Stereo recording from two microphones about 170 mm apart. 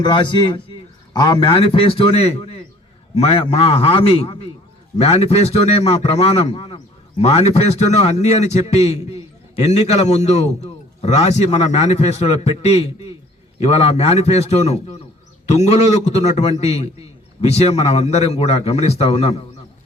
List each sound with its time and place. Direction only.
0.0 s a man's voice: 30° left (ahead or behind)